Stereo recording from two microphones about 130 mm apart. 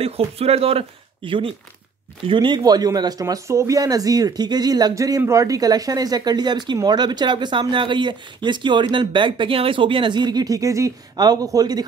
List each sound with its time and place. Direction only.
0.0 s speech: 50° right (ahead or behind); by 11.8 s 30° right (ahead or behind)